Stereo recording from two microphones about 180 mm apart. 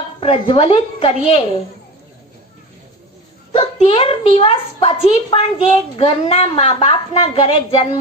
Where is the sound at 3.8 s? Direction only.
30° left (ahead or behind).